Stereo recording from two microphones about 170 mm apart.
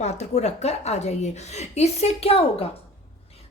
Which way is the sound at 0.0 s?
40° left (ahead or behind).